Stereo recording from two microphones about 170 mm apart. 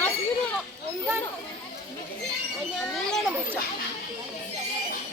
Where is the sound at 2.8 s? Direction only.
5° left (ahead or behind).